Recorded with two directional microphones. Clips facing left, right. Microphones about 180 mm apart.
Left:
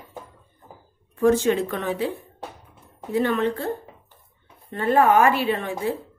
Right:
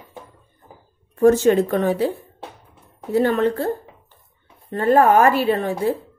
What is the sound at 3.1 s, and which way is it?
Speech, 40° right (ahead or behind).